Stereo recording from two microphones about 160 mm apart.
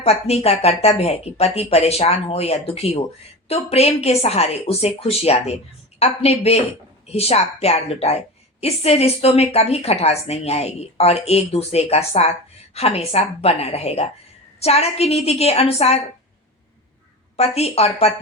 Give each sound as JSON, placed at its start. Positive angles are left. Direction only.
{"t": 0.0, "sound": "a woman's voice", "side_deg": 40}
{"t": 17.3, "sound": "a woman's voice", "side_deg": 40}